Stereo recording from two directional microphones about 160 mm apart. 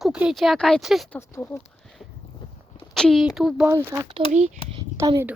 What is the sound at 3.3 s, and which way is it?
Speech, centre (ahead or behind).